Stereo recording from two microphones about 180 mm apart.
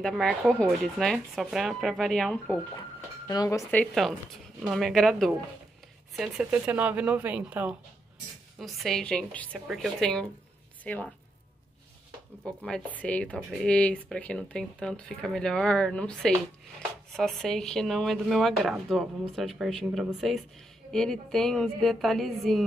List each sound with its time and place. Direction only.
0.0 s speech: 5° left (ahead or behind)
3.3 s speech: 20° left (ahead or behind)
3.8 s speech: centre (ahead or behind)
12.4 s speech: 5° left (ahead or behind)